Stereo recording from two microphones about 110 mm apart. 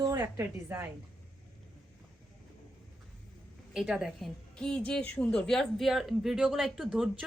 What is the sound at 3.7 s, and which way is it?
Speech, 5° right (ahead or behind).